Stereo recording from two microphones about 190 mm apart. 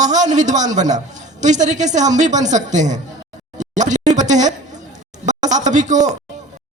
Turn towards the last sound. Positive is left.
turn(degrees=-40)  # may be behind; listen again after turning